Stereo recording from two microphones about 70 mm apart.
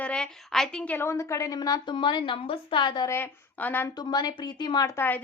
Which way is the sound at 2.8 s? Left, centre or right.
Left.